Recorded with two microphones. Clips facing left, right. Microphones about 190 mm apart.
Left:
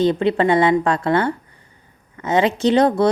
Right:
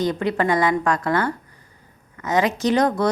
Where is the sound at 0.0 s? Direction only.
25° left (ahead or behind).